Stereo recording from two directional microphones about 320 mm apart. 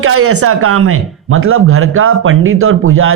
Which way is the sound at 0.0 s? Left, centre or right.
Right.